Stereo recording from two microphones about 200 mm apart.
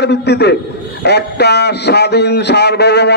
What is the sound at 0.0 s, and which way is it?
A man's voice, 60° left (ahead or behind).